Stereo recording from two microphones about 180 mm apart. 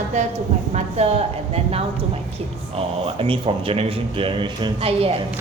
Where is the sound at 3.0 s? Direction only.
30° right (ahead or behind).